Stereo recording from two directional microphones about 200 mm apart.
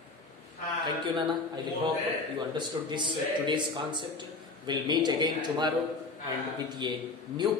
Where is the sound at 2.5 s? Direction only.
25° right (ahead or behind).